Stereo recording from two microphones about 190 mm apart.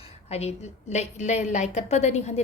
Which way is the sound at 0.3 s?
35° left (ahead or behind).